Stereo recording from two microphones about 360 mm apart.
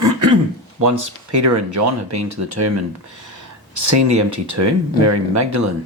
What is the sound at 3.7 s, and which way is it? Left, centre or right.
Speech, right.